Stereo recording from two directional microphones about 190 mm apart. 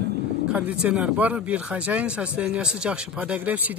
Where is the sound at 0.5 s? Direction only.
5° right (ahead or behind).